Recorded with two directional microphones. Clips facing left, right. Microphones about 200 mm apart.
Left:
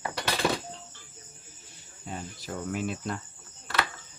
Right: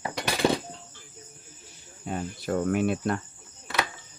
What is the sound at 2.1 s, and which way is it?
Cricket, 60° right (ahead or behind).